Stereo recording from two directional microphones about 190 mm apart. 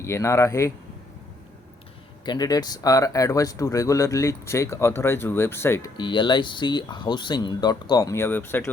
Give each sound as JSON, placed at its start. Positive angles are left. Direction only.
{"t": 0.0, "sound": "speech", "side_deg": 15}
{"t": 2.2, "sound": "speech", "side_deg": 20}
{"t": 6.0, "sound": "speech", "side_deg": 25}